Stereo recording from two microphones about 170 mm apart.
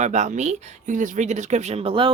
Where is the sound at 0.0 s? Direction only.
45° right (ahead or behind).